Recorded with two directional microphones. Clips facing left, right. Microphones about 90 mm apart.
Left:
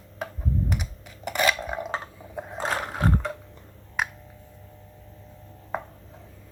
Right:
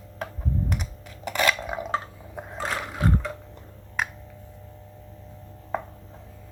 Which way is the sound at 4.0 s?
5° left (ahead or behind).